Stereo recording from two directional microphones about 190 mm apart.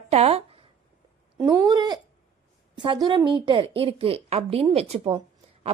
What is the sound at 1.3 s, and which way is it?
Speech, 15° right (ahead or behind).